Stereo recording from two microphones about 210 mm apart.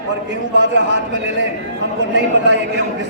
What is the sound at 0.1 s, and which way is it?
Speech, 60° right (ahead or behind).